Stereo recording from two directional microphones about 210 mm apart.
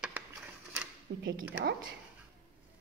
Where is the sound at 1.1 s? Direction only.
55° right (ahead or behind).